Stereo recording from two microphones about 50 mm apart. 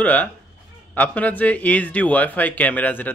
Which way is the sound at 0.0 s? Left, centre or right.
Left.